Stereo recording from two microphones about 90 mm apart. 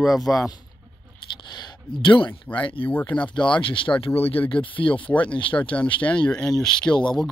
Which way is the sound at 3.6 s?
70° left (ahead or behind).